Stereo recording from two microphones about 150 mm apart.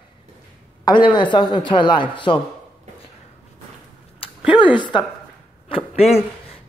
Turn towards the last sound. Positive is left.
turn(degrees=45)  # may be behind; listen again after turning